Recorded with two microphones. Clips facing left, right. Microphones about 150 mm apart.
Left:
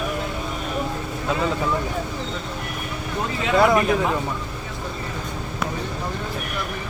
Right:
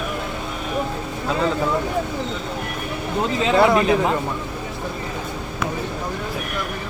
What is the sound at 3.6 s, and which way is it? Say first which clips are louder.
Speech: even; 20° right (ahead or behind).